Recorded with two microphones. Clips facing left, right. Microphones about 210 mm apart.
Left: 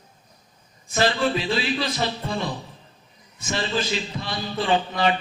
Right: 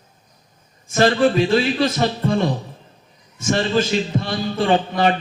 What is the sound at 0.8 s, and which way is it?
A man's voice, 45° right (ahead or behind).